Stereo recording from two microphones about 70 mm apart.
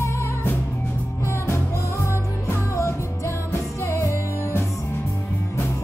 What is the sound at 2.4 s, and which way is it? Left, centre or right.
Music, left.